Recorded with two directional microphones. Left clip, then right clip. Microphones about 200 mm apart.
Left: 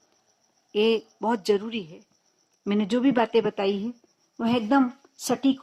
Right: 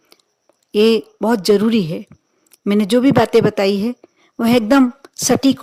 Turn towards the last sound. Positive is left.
turn(degrees=-50)  # may be behind; listen again after turning